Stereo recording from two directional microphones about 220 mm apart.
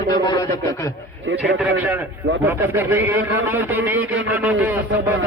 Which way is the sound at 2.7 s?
10° right (ahead or behind).